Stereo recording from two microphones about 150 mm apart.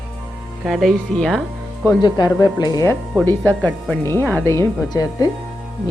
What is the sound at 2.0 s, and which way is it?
Speech, 30° left (ahead or behind).